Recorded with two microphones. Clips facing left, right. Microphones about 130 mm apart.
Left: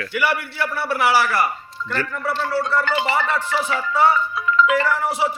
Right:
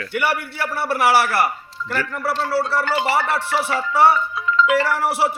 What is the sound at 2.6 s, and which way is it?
Speech, 30° right (ahead or behind).